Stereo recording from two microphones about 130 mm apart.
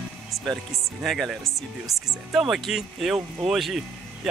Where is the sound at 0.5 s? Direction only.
Centre (ahead or behind).